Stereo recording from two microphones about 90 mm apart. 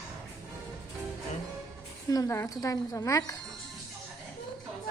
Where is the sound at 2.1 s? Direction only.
35° left (ahead or behind).